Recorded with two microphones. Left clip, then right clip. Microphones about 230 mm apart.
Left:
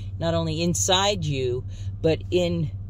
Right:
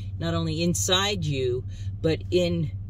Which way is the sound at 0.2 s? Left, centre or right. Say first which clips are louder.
Left 3 dB; right.